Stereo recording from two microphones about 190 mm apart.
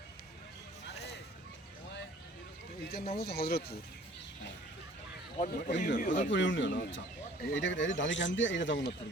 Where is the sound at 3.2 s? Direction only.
55° left (ahead or behind).